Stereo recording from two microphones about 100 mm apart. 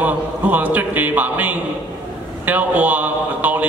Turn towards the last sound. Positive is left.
turn(degrees=-15)  # may be behind; listen again after turning